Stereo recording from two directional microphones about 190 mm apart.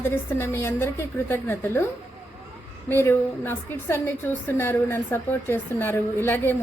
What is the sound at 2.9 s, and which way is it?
A woman's voice, 10° left (ahead or behind).